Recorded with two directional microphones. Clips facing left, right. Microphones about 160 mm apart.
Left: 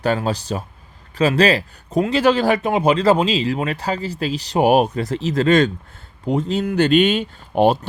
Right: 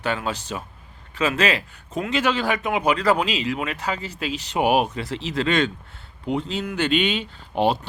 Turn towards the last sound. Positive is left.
turn(degrees=45)  # may be behind; listen again after turning